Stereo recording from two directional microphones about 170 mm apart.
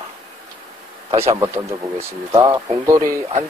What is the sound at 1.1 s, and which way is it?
Speech, 35° right (ahead or behind).